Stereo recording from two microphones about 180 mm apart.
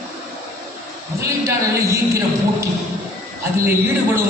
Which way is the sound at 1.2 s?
15° right (ahead or behind).